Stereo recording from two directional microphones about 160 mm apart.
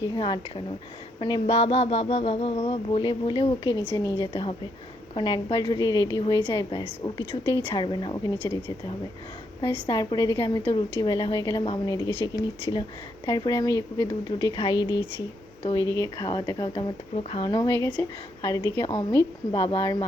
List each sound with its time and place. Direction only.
0.1 s speech: 30° left (ahead or behind)
4.3 s speech: 35° left (ahead or behind)
8.4 s speech: 15° left (ahead or behind)
9.6 s speech: 25° left (ahead or behind)